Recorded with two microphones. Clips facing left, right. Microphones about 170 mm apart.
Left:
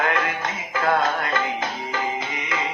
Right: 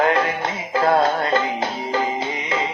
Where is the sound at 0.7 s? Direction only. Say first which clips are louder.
Right 4 dB; 30° right (ahead or behind).